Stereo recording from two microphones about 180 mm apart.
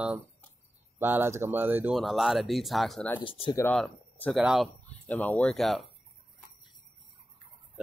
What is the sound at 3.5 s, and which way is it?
Speech, 15° left (ahead or behind).